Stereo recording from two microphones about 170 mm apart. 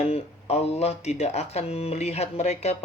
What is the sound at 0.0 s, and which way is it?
Speech, 40° left (ahead or behind).